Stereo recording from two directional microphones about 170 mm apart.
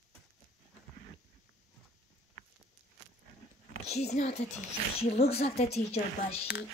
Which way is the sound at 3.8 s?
40° left (ahead or behind).